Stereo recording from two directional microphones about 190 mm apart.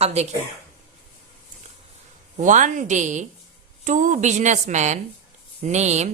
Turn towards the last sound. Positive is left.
turn(degrees=-35)  # may be behind; listen again after turning